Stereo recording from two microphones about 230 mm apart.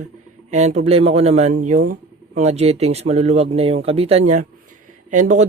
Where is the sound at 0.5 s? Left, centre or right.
Right.